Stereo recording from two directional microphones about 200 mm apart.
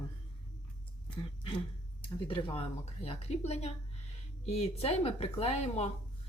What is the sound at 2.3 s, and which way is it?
A woman's voice, 30° left (ahead or behind).